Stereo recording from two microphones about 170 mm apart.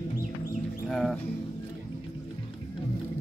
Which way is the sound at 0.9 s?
Centre (ahead or behind).